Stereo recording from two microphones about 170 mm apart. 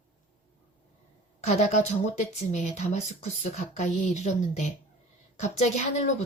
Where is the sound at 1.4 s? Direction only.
40° left (ahead or behind).